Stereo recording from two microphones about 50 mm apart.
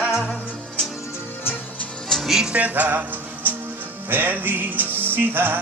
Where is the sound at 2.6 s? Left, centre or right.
Right.